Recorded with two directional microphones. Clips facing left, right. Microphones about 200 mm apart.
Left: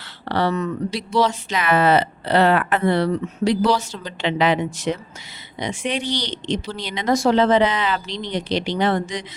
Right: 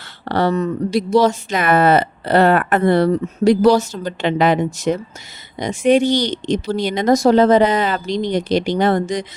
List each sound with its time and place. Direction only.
0.3 s speech: 45° right (ahead or behind)